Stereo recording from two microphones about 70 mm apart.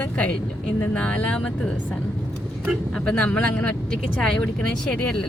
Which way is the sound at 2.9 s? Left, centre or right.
Centre.